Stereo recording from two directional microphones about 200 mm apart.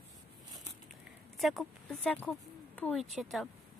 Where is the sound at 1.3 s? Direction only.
Centre (ahead or behind).